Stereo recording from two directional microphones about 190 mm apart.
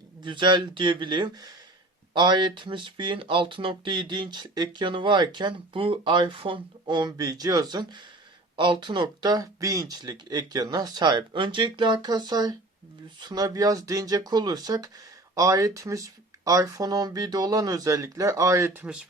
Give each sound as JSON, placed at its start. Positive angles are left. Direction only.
{"t": 0.2, "sound": "speech", "side_deg": -25}